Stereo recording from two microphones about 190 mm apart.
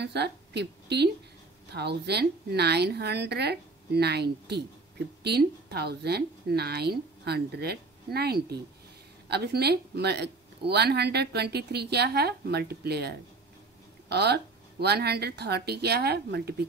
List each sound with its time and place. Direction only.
0.0 s a woman's voice: 60° right (ahead or behind)